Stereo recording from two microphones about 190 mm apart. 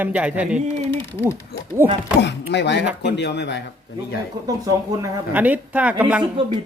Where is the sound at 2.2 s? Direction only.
65° left (ahead or behind).